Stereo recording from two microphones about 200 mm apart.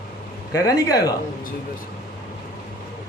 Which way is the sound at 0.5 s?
20° left (ahead or behind).